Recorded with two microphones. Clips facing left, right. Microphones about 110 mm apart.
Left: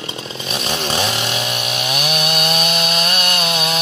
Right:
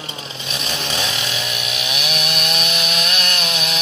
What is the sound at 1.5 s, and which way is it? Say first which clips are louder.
Chainsaw: left 4 dB; 45° left (ahead or behind).